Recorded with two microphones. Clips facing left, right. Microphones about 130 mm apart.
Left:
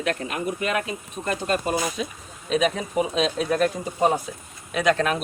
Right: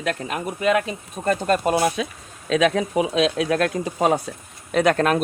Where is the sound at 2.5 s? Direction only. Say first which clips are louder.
Right 4 dB; 90° right.